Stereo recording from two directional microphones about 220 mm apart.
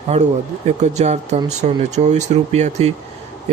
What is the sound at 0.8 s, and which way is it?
Speech, 30° right (ahead or behind).